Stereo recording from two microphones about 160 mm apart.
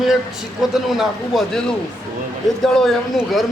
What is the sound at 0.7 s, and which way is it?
A man's voice, centre (ahead or behind).